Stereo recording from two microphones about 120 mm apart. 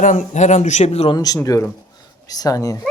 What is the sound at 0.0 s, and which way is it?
Speech, 90° left.